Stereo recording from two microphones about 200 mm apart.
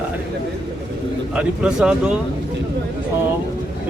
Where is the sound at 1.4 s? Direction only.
5° right (ahead or behind).